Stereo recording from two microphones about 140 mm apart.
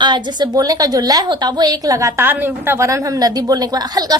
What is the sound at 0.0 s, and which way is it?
A woman's voice, 35° right (ahead or behind).